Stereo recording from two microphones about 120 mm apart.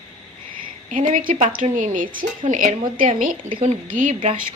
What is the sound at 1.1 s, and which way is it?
Speech, 90° right.